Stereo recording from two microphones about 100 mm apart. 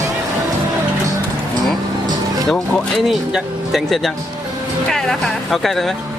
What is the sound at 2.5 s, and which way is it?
Speech, centre (ahead or behind).